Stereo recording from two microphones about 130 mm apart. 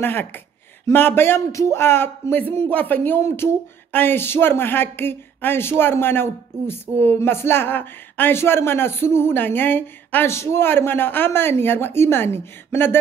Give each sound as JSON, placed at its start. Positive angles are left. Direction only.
{"t": 0.0, "sound": "speech", "side_deg": 15}